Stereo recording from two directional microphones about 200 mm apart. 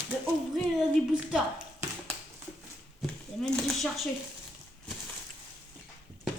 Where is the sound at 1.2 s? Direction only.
5° right (ahead or behind).